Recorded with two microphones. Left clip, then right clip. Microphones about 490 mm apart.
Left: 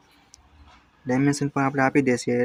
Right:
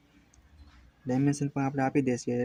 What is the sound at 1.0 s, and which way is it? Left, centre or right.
Speech, right.